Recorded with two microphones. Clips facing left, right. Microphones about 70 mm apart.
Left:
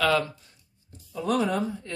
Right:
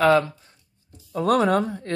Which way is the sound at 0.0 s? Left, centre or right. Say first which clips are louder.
Right 6 dB; right.